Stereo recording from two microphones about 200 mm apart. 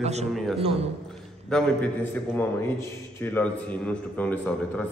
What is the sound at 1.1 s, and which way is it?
A man's voice, 5° left (ahead or behind).